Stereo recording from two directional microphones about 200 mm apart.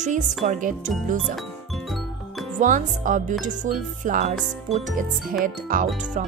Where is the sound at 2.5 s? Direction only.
40° right (ahead or behind).